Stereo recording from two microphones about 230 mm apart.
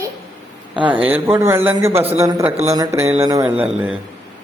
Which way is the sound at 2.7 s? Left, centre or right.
Centre.